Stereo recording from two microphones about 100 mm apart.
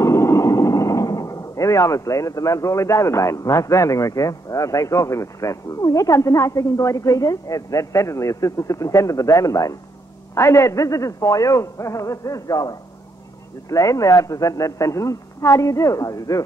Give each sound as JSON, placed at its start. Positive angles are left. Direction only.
{"t": 0.0, "sound": "speech", "side_deg": 30}